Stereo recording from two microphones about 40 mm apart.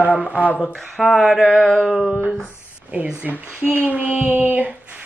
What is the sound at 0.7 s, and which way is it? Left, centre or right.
Speech, centre.